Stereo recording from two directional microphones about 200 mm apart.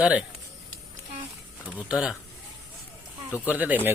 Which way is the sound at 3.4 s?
10° right (ahead or behind).